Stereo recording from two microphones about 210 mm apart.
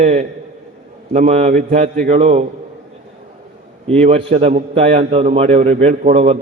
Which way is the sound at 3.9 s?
30° right (ahead or behind).